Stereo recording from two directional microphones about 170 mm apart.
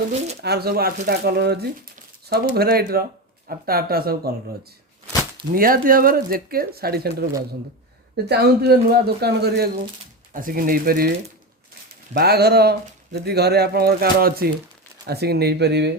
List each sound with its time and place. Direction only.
0.4 s a man's voice: 70° right (ahead or behind)
2.6 s speech: 65° right (ahead or behind)
5.5 s a man's voice: 55° right (ahead or behind)
10.3 s speech: 55° right (ahead or behind)
12.1 s a man's voice: 70° right (ahead or behind)